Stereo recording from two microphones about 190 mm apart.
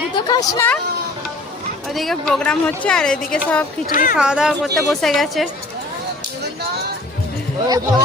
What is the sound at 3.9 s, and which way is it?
Speech, 45° left (ahead or behind).